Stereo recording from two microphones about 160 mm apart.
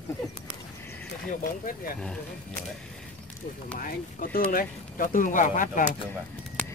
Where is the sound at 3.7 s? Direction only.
60° left (ahead or behind).